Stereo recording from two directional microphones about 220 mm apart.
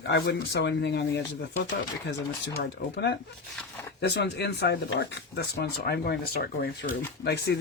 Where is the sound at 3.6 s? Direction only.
10° left (ahead or behind).